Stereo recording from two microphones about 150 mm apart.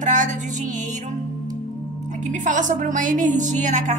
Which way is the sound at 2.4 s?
55° right (ahead or behind).